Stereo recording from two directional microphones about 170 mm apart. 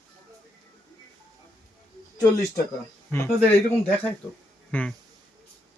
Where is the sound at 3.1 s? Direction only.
10° left (ahead or behind).